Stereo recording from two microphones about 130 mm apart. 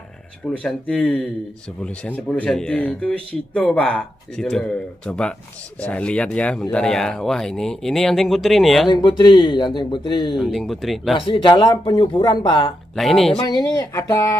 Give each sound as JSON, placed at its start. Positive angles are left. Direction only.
{"t": 0.5, "sound": "speech", "side_deg": 10}
{"t": 8.8, "sound": "speech", "side_deg": 35}
{"t": 10.3, "sound": "speech", "side_deg": 0}
{"t": 11.1, "sound": "speech", "side_deg": 40}
{"t": 12.9, "sound": "speech", "side_deg": 0}
{"t": 13.5, "sound": "speech", "side_deg": 30}